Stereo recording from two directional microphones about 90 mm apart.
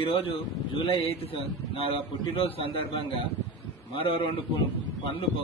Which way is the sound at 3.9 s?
75° left (ahead or behind).